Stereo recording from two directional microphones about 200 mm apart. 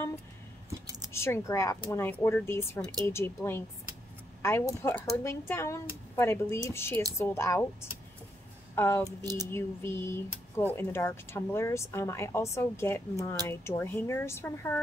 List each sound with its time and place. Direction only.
1.1 s speech: 15° left (ahead or behind)
8.7 s speech: 15° left (ahead or behind)
9.0 s speech: 20° right (ahead or behind)
9.5 s speech: 10° left (ahead or behind)